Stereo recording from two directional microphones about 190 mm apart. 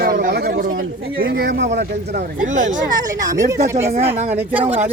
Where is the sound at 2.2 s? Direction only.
40° right (ahead or behind).